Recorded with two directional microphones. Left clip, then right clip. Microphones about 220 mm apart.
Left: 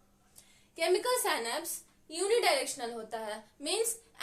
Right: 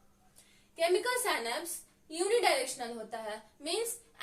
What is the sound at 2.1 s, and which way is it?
A woman's voice, 45° left (ahead or behind).